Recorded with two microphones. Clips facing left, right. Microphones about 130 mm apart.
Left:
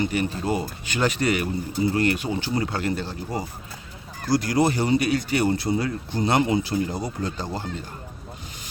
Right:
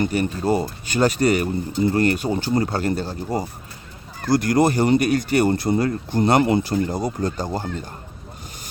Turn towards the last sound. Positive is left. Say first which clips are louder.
# right 5 dB
turn(degrees=-45)  # may be behind; listen again after turning